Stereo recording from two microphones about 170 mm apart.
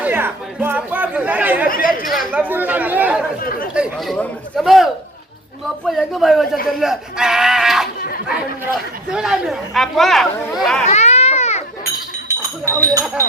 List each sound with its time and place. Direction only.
0.0 s speech: 10° right (ahead or behind)
1.6 s speech: 55° left (ahead or behind)
2.0 s speech: 5° right (ahead or behind)
3.4 s speech: 60° left (ahead or behind)
3.8 s speech: centre (ahead or behind)
9.1 s speech: 5° right (ahead or behind)
10.8 s baby cry: 40° left (ahead or behind)
12.6 s speech: 20° right (ahead or behind)